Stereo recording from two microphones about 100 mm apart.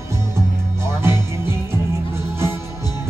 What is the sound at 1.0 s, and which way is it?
Music, 25° right (ahead or behind).